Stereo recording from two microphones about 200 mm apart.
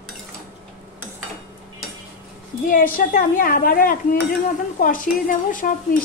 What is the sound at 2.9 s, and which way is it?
A woman's voice, 45° left (ahead or behind).